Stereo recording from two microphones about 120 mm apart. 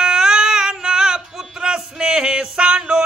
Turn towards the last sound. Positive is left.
turn(degrees=-10)  # may be behind; listen again after turning